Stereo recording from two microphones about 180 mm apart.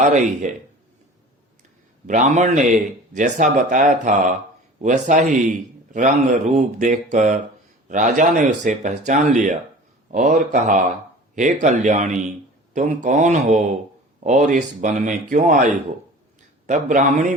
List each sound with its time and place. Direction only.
0.0 s a man's voice: 45° right (ahead or behind)
2.0 s a man's voice: 45° right (ahead or behind)
16.6 s a man's voice: 45° right (ahead or behind)